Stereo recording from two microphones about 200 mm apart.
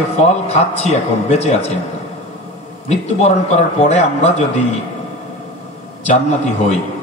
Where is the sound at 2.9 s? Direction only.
35° left (ahead or behind).